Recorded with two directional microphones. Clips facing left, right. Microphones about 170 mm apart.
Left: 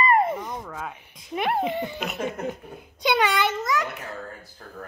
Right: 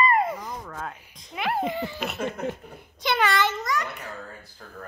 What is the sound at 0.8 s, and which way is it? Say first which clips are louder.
Speech: left 1 dB; 5° left (ahead or behind).